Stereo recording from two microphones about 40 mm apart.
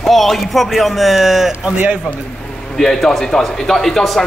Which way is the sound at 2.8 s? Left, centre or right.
Centre.